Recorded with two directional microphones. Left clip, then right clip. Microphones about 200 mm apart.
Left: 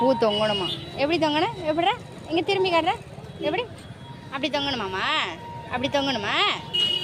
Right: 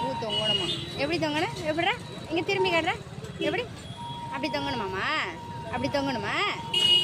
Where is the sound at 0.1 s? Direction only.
35° left (ahead or behind).